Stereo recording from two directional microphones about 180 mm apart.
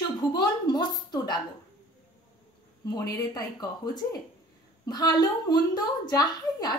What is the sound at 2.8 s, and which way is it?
A woman's voice, 20° left (ahead or behind).